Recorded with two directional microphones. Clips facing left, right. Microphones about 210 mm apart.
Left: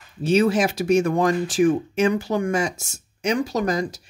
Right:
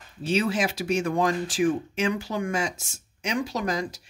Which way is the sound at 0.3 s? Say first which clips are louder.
Left 6 dB; 45° left (ahead or behind).